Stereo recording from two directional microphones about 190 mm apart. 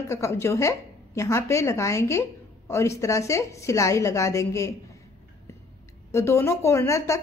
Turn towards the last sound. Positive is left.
turn(degrees=15)  # may be behind; listen again after turning